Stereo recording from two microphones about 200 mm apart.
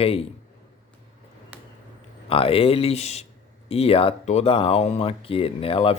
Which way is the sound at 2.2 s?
30° left (ahead or behind).